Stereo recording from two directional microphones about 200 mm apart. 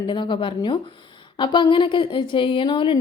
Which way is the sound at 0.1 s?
25° left (ahead or behind).